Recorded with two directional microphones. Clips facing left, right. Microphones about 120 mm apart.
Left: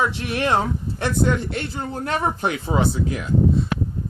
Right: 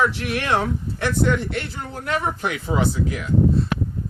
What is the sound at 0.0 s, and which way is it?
A man's voice, 25° left (ahead or behind).